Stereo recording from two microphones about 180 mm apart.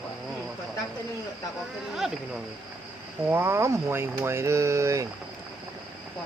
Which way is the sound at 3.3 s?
15° right (ahead or behind).